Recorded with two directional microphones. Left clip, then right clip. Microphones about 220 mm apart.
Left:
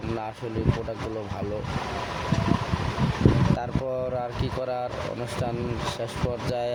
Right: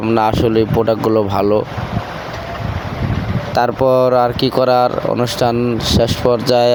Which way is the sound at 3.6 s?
45° right (ahead or behind).